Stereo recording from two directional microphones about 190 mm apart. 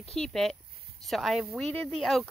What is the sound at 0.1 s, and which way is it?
Speech, centre (ahead or behind).